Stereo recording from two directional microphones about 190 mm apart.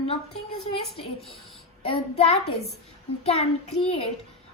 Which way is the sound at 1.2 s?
Centre (ahead or behind).